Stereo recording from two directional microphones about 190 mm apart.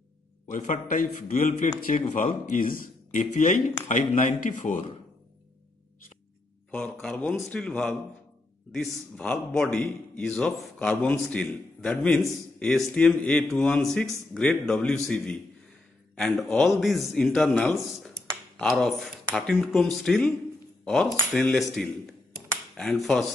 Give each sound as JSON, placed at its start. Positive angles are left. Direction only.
{"t": 0.5, "sound": "a man's voice", "side_deg": 45}
{"t": 6.7, "sound": "a man's voice", "side_deg": 5}